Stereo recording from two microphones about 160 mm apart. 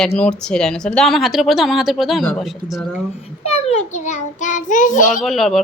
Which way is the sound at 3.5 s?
40° left (ahead or behind).